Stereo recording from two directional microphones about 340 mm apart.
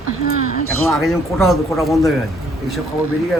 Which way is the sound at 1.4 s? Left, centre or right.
Centre.